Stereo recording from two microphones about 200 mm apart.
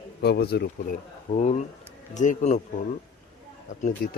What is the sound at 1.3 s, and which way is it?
Speech, 35° left (ahead or behind).